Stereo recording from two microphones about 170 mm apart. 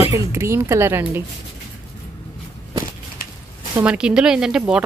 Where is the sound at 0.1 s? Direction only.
15° right (ahead or behind).